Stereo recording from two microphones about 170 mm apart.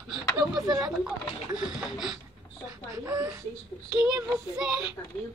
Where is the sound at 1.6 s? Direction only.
5° right (ahead or behind).